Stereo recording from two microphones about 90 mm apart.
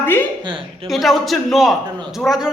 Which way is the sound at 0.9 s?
Centre (ahead or behind).